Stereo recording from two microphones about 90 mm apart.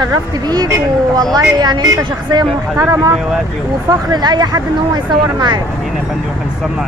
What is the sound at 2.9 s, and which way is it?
Speech, 40° right (ahead or behind).